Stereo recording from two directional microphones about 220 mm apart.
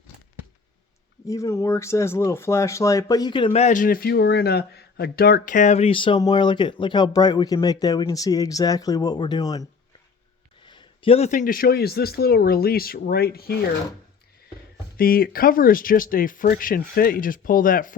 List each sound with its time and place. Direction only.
1.3 s speech: 15° left (ahead or behind)
10.7 s speech: 25° left (ahead or behind); by 13.4 s 45° left (ahead or behind)
14.9 s speech: 40° left (ahead or behind)